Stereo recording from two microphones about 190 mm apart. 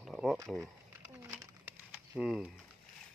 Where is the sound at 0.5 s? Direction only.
15° right (ahead or behind).